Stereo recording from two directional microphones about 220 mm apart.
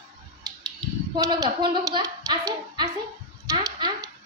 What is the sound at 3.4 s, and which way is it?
Dog, 15° right (ahead or behind).